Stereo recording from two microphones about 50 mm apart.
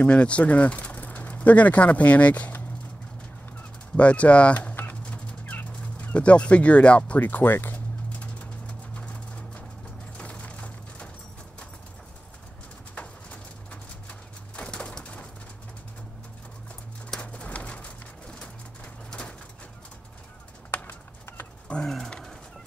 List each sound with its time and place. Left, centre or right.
0.0 s speech: left
3.9 s speech: left
5.9 s speech: left
7.6 s pigeon: left
10.1 s a sound: left
12.9 s horse: left
14.7 s bird: centre
17.2 s bird: left
19.0 s bird: centre
20.7 s clip-clop: left
21.8 s pigeon: centre